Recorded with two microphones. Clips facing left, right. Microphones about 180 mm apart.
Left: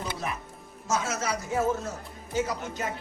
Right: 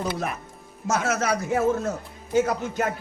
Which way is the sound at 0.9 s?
60° right (ahead or behind).